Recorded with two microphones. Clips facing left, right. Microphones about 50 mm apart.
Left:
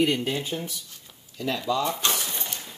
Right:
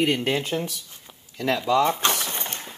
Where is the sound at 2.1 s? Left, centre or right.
Right.